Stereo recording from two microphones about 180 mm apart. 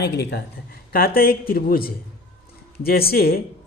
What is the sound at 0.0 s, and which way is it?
Speech, 65° left (ahead or behind).